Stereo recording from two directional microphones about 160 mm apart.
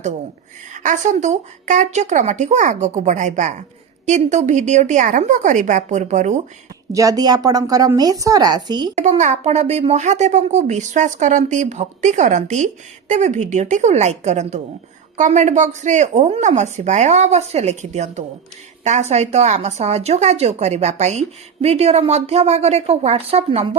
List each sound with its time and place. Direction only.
0.7 s speech: 55° right (ahead or behind)
6.9 s speech: 20° right (ahead or behind)
9.0 s speech: 50° right (ahead or behind)